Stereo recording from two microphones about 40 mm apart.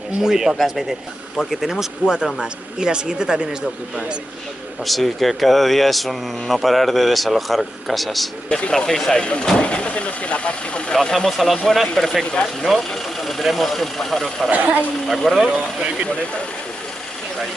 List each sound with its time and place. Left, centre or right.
0.2 s speech: centre
4.8 s speech: centre
8.5 s speech: left
8.7 s speech: centre
9.2 s speech: left
11.1 s speech: centre
12.7 s speech: centre
14.5 s speech: right
15.3 s speech: centre